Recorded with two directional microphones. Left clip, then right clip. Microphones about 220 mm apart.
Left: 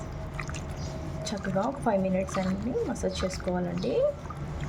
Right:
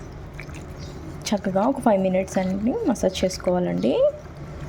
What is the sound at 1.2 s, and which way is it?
A woman's voice, 30° right (ahead or behind).